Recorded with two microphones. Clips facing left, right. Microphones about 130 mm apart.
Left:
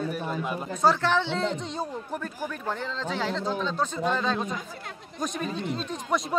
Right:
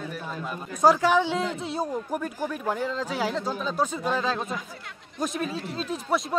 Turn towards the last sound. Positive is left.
turn(degrees=-5)  # may be behind; listen again after turning